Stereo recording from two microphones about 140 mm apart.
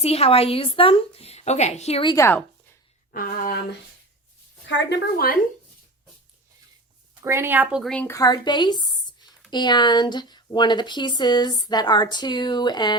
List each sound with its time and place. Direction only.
0.0 s a woman's voice: 45° left (ahead or behind)
2.0 s a woman's voice: 20° left (ahead or behind)
3.1 s a sound: 90° left
5.1 s a sound: 90° left
7.3 s a woman's voice: 15° right (ahead or behind)
8.0 s speech: 25° left (ahead or behind)